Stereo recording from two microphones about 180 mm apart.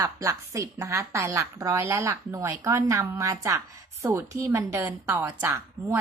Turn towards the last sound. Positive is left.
turn(degrees=-15)  # may be behind; listen again after turning